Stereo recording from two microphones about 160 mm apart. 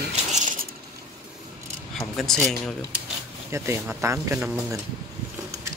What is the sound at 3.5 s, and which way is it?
Speech, 15° right (ahead or behind).